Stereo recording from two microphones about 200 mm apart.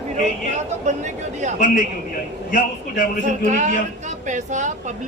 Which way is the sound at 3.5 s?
35° right (ahead or behind).